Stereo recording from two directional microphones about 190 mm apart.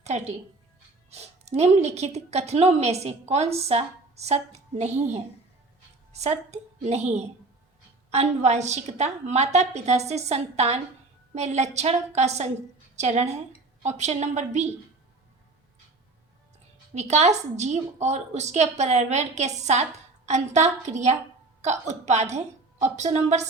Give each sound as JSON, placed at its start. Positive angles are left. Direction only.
{"t": 0.0, "sound": "a woman's voice", "side_deg": -35}
{"t": 16.9, "sound": "a woman's voice", "side_deg": -35}